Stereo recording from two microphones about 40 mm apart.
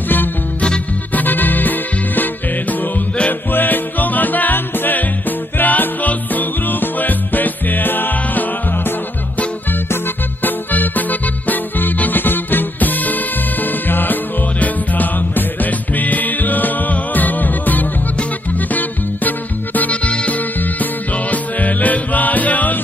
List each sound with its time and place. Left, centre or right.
1.1 s music: left
3.5 s music: left
10.4 s music: left
21.3 s music: left